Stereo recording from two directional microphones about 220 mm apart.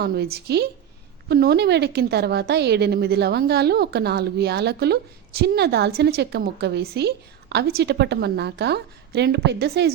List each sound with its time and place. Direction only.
0.0 s a woman's voice: 45° right (ahead or behind)